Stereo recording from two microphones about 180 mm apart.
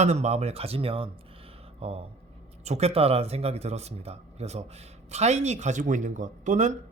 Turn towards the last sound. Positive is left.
turn(degrees=-45)  # may be behind; listen again after turning